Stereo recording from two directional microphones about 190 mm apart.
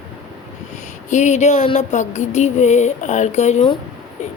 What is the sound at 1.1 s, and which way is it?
Speech, 40° left (ahead or behind).